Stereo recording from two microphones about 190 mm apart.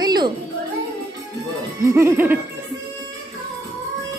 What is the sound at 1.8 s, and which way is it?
Music, 15° right (ahead or behind).